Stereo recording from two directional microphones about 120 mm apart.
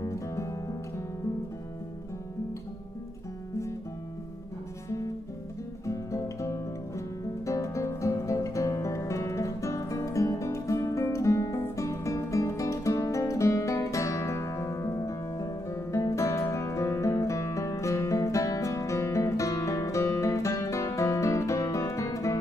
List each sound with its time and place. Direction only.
0.0 s music: 25° left (ahead or behind)
5.9 s music: 25° left (ahead or behind)